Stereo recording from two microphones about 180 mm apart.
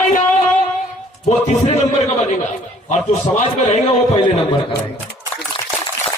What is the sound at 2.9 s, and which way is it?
A man's voice, 40° left (ahead or behind).